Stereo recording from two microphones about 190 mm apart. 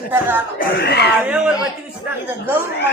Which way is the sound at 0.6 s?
60° left (ahead or behind).